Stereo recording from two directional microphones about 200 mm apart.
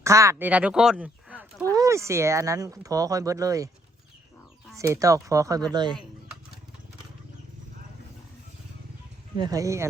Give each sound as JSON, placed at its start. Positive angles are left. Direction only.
{"t": 0.0, "sound": "speech", "side_deg": -15}
{"t": 4.8, "sound": "speech", "side_deg": -15}
{"t": 9.4, "sound": "speech", "side_deg": -15}